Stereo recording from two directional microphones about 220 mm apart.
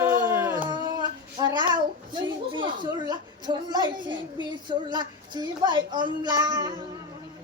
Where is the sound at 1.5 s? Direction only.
20° right (ahead or behind).